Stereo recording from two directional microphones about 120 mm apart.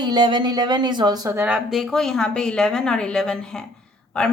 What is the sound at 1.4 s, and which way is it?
Speech, 10° right (ahead or behind).